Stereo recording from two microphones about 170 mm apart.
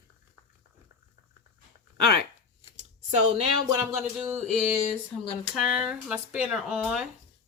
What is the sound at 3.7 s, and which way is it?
Speech, 5° right (ahead or behind).